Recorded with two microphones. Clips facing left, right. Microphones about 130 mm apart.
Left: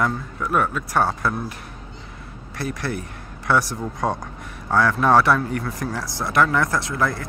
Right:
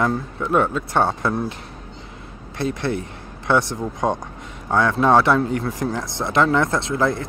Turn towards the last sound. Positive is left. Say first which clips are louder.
# right 3 dB
turn(degrees=-25)  # may be behind; listen again after turning